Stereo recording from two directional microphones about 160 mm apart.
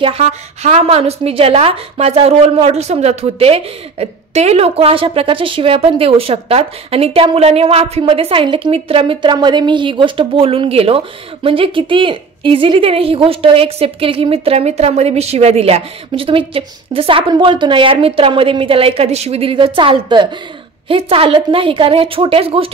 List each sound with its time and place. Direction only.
0.0 s a woman's voice: 40° right (ahead or behind)